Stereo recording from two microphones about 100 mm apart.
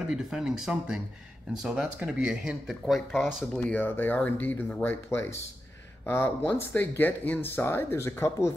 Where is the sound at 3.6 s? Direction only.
20° left (ahead or behind).